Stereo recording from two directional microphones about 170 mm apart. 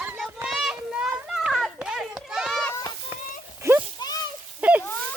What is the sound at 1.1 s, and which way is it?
Children playing, 5° right (ahead or behind).